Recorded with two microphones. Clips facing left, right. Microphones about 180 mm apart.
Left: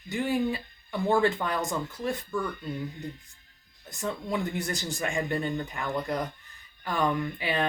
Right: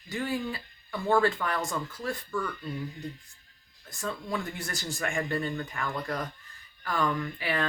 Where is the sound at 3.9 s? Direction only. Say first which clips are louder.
Left 2 dB; 20° left (ahead or behind).